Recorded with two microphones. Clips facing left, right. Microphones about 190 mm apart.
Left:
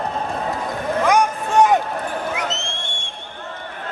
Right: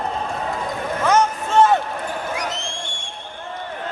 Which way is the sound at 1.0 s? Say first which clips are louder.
Right 1 dB; 15° left (ahead or behind).